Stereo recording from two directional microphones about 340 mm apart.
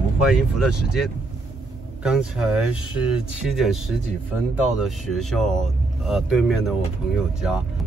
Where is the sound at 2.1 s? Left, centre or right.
Centre.